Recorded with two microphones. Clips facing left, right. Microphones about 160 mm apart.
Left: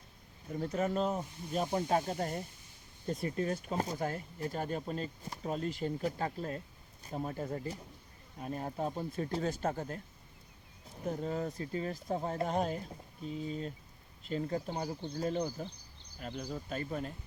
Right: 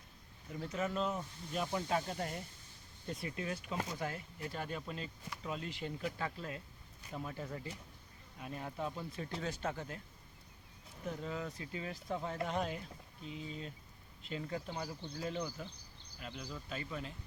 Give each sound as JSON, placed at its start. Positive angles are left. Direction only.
{"t": 0.4, "sound": "speech", "side_deg": 40}
{"t": 11.0, "sound": "speech", "side_deg": 40}